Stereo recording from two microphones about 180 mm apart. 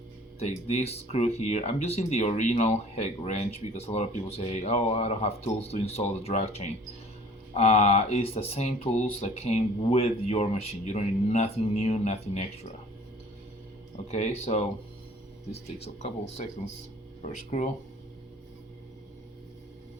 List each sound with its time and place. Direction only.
0.3 s speech: 35° left (ahead or behind)
14.1 s speech: 35° left (ahead or behind)